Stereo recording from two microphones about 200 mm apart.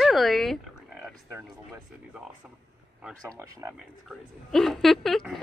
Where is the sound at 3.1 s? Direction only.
15° right (ahead or behind).